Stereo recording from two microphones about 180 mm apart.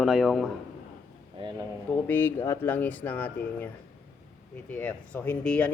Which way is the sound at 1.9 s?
10° left (ahead or behind).